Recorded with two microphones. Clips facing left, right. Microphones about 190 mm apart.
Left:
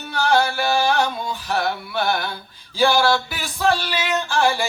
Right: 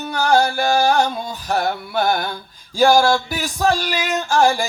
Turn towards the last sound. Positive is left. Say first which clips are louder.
# right 3 dB
turn(degrees=-40)  # may be behind; listen again after turning